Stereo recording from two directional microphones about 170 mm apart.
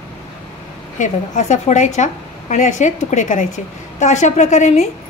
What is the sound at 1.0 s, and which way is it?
A woman's voice, 45° left (ahead or behind).